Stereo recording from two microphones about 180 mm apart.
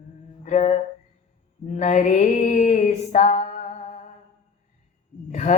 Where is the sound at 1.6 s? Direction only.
40° left (ahead or behind).